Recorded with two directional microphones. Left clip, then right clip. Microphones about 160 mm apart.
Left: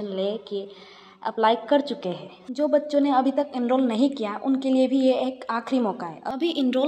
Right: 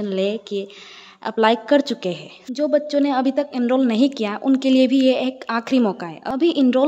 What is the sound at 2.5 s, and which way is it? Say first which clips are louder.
A woman's voice: right 3 dB; 35° right (ahead or behind).